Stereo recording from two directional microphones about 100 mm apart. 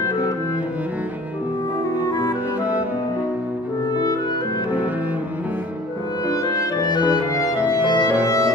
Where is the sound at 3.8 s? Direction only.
40° left (ahead or behind).